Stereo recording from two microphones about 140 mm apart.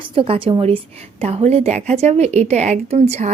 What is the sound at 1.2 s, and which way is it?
Speech, 50° right (ahead or behind).